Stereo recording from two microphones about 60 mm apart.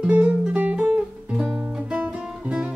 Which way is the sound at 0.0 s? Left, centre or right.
Centre.